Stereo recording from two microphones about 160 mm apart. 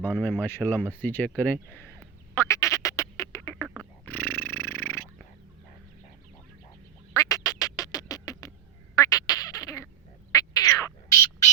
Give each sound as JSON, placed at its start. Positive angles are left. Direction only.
{"t": 0.0, "sound": "speech", "side_deg": 10}
{"t": 1.7, "sound": "duck", "side_deg": 10}
{"t": 7.1, "sound": "quack", "side_deg": 20}
{"t": 9.0, "sound": "duck", "side_deg": 20}
{"t": 10.3, "sound": "bird", "side_deg": 20}